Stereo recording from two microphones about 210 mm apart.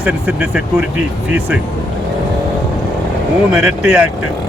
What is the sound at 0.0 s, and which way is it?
Speech, 5° right (ahead or behind).